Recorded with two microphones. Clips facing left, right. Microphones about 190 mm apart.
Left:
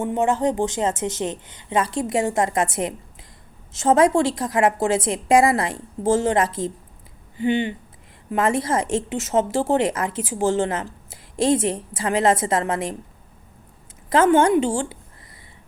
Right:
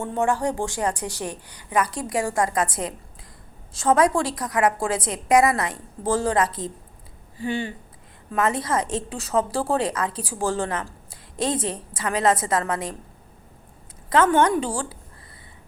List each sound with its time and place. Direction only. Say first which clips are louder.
0.0 s a woman's voice: left 3 dB; 20° left (ahead or behind)
14.1 s a woman's voice: left 3 dB; 25° left (ahead or behind)